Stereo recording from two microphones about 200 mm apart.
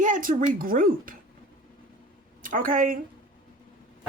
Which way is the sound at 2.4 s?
45° right (ahead or behind).